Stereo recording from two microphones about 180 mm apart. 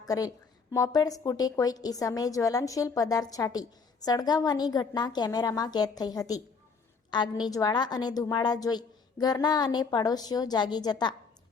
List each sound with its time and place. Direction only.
0.1 s a woman's voice: 20° left (ahead or behind)